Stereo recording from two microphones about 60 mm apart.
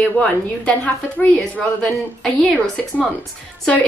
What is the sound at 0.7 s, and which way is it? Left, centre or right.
A woman's voice, left.